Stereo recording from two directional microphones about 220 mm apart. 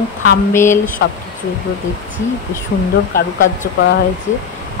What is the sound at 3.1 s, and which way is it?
Speech, 10° left (ahead or behind).